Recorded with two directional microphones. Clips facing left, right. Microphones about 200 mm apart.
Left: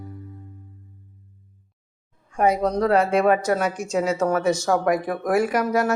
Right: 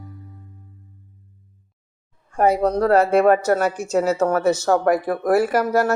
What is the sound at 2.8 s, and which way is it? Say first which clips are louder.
Speech: right 3 dB; 60° right (ahead or behind).